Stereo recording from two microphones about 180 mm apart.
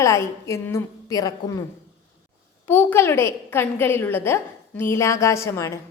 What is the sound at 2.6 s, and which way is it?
A woman's voice, 10° left (ahead or behind).